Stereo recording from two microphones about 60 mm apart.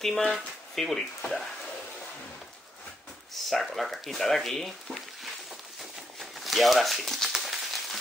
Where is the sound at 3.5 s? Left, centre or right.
Centre.